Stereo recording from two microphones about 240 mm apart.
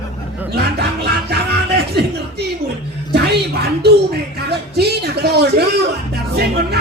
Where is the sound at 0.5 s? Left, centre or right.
Right.